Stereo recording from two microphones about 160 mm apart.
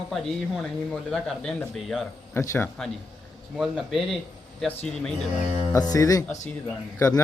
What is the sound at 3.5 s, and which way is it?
Speech, centre (ahead or behind).